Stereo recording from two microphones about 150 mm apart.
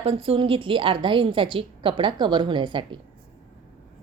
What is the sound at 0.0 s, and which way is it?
A woman's voice, 40° right (ahead or behind).